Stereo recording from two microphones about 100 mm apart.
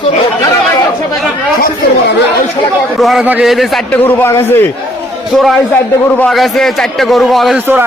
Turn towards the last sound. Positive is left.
turn(degrees=0)  # may be behind; listen again after turning